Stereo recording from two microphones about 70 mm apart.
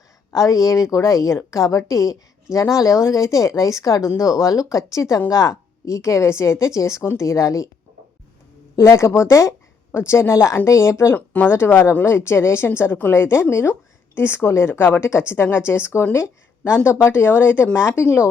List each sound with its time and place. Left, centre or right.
0.3 s a woman's voice: left
8.7 s a woman's voice: left